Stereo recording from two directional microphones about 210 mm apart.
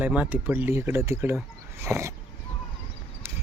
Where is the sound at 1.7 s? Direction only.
15° right (ahead or behind).